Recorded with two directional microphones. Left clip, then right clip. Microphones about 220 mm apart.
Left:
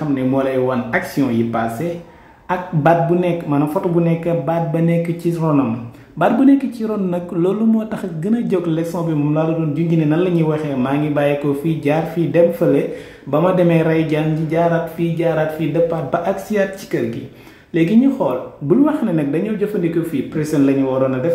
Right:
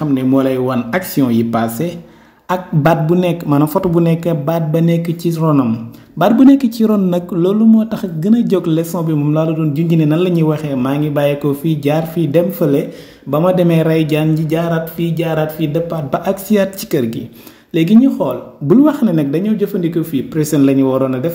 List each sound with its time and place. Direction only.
0.1 s speech: 45° right (ahead or behind)